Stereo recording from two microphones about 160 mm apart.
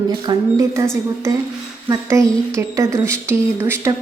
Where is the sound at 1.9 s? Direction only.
20° right (ahead or behind).